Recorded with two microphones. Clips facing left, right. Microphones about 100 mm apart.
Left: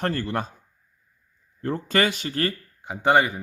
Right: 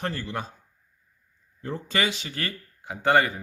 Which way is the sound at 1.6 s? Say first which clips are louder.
Left 5 dB; 50° left (ahead or behind).